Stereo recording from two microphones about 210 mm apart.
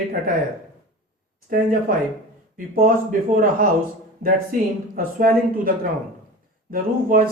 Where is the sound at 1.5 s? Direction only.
40° right (ahead or behind).